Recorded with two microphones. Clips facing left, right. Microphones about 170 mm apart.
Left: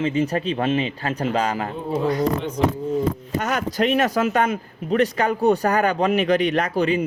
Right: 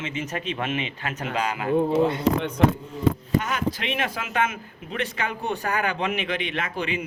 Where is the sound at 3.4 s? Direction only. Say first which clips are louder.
Left 6 dB; 40° left (ahead or behind).